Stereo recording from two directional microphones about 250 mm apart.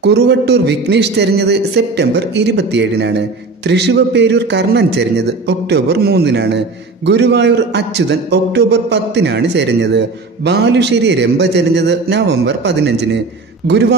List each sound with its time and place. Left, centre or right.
0.0 s a man's voice: right